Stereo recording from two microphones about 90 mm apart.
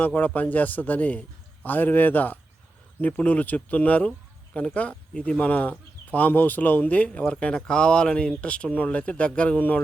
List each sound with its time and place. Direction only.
0.0 s a man's voice: 20° left (ahead or behind)